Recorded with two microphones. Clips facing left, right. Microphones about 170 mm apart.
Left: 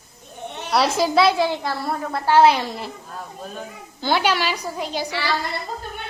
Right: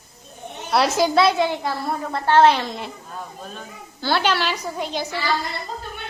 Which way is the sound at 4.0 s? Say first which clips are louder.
Left 1 dB; 15° left (ahead or behind).